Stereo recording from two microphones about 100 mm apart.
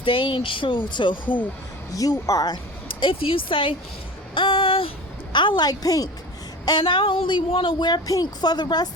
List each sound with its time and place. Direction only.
0.0 s speech: 60° left (ahead or behind)
1.9 s speech: 35° left (ahead or behind)
3.0 s speech: 65° left (ahead or behind)
4.4 s a sound: 60° left (ahead or behind)
5.3 s a woman's voice: 50° left (ahead or behind)
6.7 s a woman's voice: 55° left (ahead or behind)